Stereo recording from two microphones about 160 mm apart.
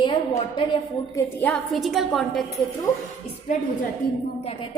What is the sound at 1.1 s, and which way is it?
Speech, 20° left (ahead or behind).